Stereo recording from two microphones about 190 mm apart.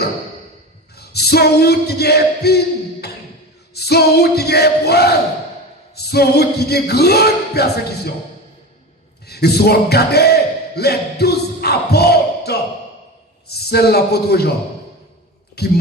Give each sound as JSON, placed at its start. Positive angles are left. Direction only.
{"t": 0.9, "sound": "a sound", "side_deg": 55}
{"t": 3.8, "sound": "music", "side_deg": 55}
{"t": 9.2, "sound": "speech", "side_deg": 60}
{"t": 13.5, "sound": "music", "side_deg": 55}
{"t": 15.6, "sound": "music", "side_deg": 55}